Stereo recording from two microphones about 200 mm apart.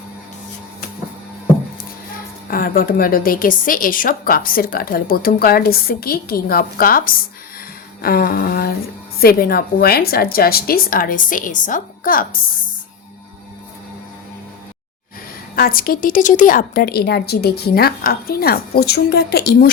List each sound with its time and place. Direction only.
2.5 s a woman's voice: 45° left (ahead or behind)
15.5 s a woman's voice: 45° left (ahead or behind)